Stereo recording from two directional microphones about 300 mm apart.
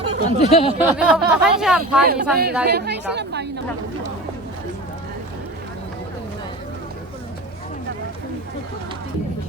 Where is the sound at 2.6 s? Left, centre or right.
Right.